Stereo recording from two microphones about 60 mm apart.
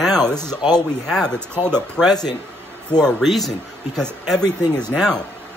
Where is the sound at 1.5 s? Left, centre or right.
Right.